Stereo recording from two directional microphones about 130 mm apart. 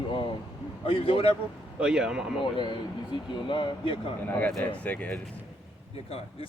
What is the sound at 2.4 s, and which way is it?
Speech, 35° left (ahead or behind).